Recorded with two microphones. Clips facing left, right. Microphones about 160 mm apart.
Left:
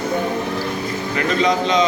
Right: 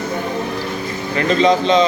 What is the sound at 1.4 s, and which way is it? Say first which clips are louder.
Speech: right 4 dB; 30° right (ahead or behind).